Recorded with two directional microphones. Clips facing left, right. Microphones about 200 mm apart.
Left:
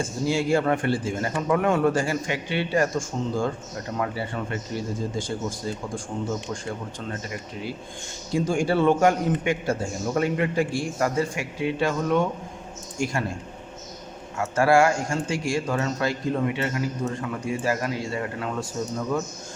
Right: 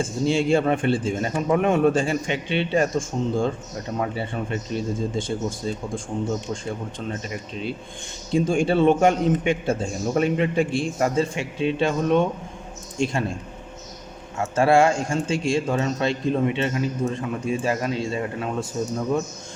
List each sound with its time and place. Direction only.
0.0 s a man's voice: 25° right (ahead or behind)
7.1 s a man's voice: 25° right (ahead or behind)
14.3 s a man's voice: 25° right (ahead or behind)